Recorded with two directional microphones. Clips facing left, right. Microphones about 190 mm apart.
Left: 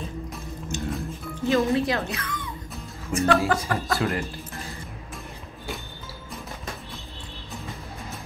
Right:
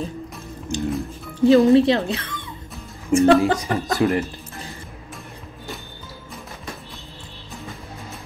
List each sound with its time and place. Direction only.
0.7 s music: 30° right (ahead or behind)
1.4 s speech: 35° right (ahead or behind)